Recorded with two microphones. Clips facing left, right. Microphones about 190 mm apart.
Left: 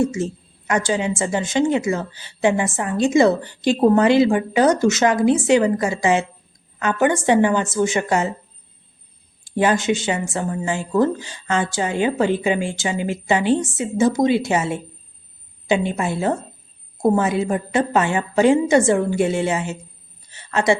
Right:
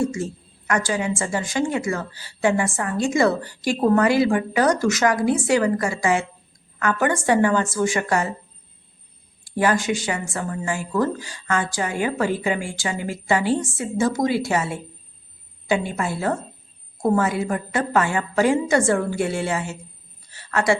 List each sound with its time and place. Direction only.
0.0 s a woman's voice: 20° left (ahead or behind)
9.4 s a woman's voice: 20° left (ahead or behind)